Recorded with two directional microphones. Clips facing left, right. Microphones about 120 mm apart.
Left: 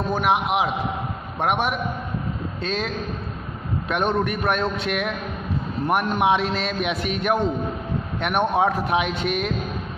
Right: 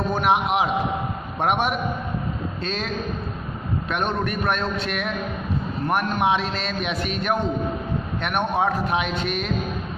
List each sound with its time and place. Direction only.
0.1 s a man's voice: 5° left (ahead or behind)
2.6 s a man's voice: 10° left (ahead or behind)
3.9 s a man's voice: 15° left (ahead or behind)